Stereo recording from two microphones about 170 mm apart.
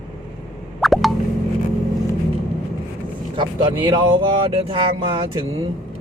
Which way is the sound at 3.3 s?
30° right (ahead or behind).